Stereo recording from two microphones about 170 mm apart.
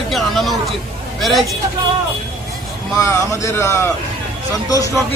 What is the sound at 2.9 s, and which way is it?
Speech, 15° left (ahead or behind).